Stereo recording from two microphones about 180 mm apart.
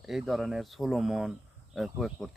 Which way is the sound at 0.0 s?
Centre (ahead or behind).